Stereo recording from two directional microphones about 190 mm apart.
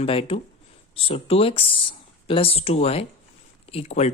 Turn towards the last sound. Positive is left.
turn(degrees=35)  # may be behind; listen again after turning